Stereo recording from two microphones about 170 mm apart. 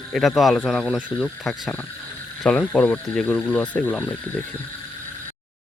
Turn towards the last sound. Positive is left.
turn(degrees=10)  # may be behind; listen again after turning